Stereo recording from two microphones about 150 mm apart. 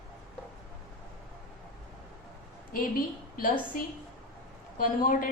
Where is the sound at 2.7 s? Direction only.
70° left (ahead or behind).